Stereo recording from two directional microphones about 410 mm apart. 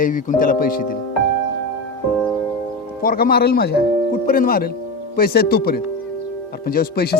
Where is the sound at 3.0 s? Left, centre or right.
Left.